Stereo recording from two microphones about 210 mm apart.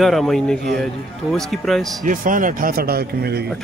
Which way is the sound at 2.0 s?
40° right (ahead or behind).